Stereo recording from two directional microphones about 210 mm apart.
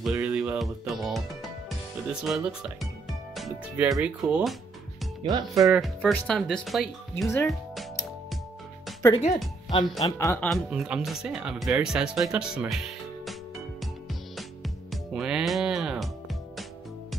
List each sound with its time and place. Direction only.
0.0 s speech: 5° right (ahead or behind)
5.2 s speech: 25° right (ahead or behind)
5.7 s speech: centre (ahead or behind)
9.7 s speech: 20° left (ahead or behind)
10.5 s speech: 5° right (ahead or behind)
14.3 s music: centre (ahead or behind)